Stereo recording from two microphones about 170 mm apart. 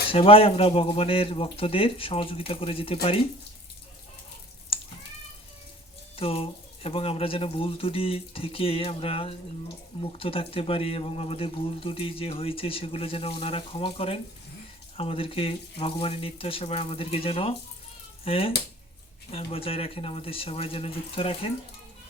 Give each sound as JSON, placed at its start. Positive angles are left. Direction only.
{"t": 0.1, "sound": "speech", "side_deg": 35}
{"t": 4.7, "sound": "cat", "side_deg": 35}
{"t": 6.1, "sound": "speech", "side_deg": 35}